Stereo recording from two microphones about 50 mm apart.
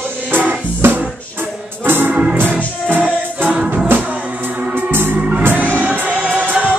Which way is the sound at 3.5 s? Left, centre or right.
Centre.